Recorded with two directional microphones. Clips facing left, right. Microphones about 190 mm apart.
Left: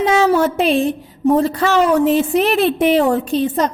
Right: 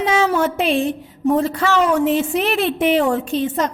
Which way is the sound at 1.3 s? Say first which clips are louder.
Left 3 dB; 35° left (ahead or behind).